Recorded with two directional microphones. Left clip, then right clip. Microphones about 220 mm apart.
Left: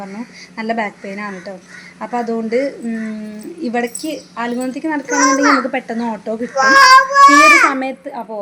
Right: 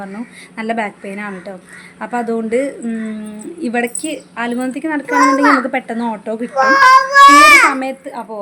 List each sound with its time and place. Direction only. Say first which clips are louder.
0.5 s a woman's voice: even; centre (ahead or behind)
5.0 s a child's voice: right 2 dB; 40° right (ahead or behind)
5.6 s speech: right 1 dB; centre (ahead or behind)
6.5 s a child's voice: left 1 dB; 40° right (ahead or behind)
7.7 s speech: right 1 dB; centre (ahead or behind)